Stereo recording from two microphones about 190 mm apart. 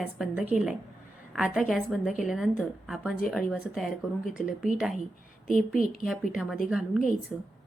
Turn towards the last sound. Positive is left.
turn(degrees=5)  # may be behind; listen again after turning